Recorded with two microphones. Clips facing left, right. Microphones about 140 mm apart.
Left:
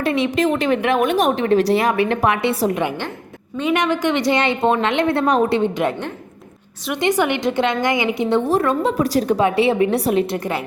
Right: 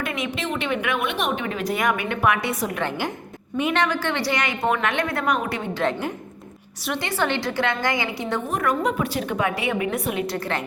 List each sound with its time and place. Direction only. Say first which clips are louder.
0.0 s speech: left 9 dB; 30° left (ahead or behind)
0.3 s a woman's voice: left 8 dB; 45° left (ahead or behind)
3.8 s a woman's voice: left 4 dB; 20° left (ahead or behind)
6.9 s a woman's voice: left 6 dB; 15° left (ahead or behind); by 10.2 s 35° left (ahead or behind)
10.3 s a woman's voice: left 4 dB; 15° left (ahead or behind)